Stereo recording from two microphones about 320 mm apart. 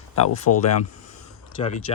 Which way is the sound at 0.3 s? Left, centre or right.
Left.